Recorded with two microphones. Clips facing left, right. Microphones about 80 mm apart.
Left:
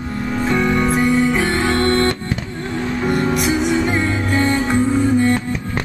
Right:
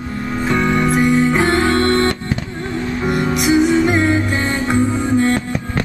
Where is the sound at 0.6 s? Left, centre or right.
Centre.